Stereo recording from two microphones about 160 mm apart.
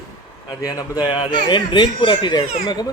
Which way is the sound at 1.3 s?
30° left (ahead or behind).